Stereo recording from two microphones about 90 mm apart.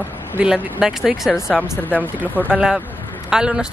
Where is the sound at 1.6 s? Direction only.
20° left (ahead or behind).